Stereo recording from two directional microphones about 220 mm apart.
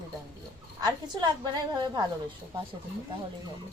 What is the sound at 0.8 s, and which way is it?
A woman's voice, 20° right (ahead or behind).